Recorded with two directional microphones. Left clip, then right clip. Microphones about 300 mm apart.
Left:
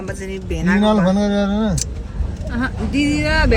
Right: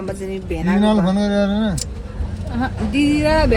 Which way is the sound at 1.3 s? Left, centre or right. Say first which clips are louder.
Right 1 dB; left.